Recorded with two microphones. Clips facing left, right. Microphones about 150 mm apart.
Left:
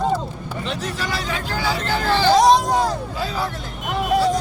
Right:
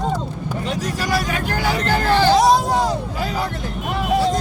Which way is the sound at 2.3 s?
Centre (ahead or behind).